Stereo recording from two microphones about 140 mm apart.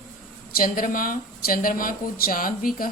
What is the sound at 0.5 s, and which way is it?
Speech, 85° left.